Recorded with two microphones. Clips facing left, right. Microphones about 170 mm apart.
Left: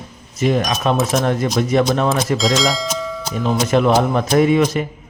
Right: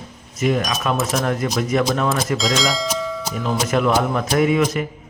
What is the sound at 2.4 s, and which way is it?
Speech, centre (ahead or behind).